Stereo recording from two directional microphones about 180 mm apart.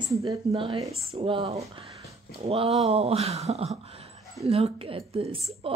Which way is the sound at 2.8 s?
35° right (ahead or behind).